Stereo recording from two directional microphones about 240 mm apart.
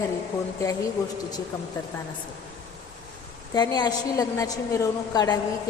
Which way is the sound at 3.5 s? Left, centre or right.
Centre.